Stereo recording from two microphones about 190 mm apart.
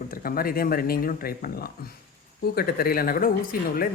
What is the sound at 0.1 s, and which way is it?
Speech, 50° left (ahead or behind).